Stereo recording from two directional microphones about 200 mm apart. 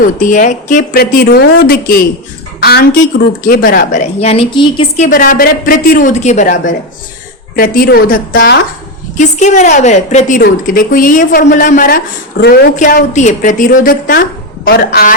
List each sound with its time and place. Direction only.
0.0 s speech: 40° left (ahead or behind)
2.6 s a sound: 50° left (ahead or behind)
3.4 s a woman's voice: 45° left (ahead or behind); by 5.0 s 25° left (ahead or behind)
5.0 s a woman's voice: 40° left (ahead or behind)
9.1 s a woman's voice: 35° left (ahead or behind)